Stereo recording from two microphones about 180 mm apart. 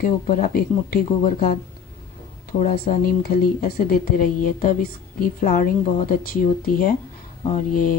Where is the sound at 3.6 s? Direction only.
45° left (ahead or behind).